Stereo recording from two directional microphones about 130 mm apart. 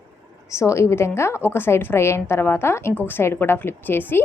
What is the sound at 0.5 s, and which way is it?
A woman's voice, 20° left (ahead or behind).